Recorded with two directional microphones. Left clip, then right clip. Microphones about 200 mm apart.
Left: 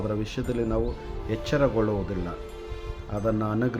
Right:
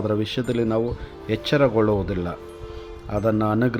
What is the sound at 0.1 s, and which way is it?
Speech, 25° right (ahead or behind).